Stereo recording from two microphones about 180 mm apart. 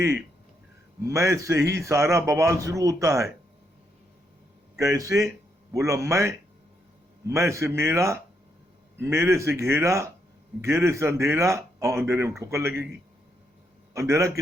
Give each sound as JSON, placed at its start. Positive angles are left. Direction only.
{"t": 1.0, "sound": "a man's voice", "side_deg": -15}
{"t": 4.8, "sound": "a man's voice", "side_deg": -15}
{"t": 13.9, "sound": "a man's voice", "side_deg": -15}